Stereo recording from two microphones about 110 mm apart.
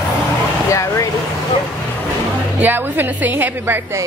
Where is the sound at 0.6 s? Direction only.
30° left (ahead or behind).